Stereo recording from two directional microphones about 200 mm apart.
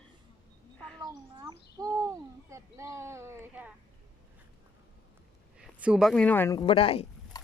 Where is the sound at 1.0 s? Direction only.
20° right (ahead or behind).